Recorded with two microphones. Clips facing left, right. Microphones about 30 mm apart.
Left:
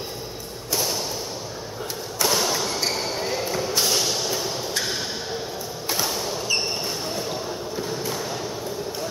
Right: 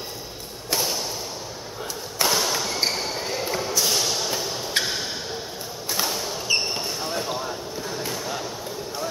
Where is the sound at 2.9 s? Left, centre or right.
Centre.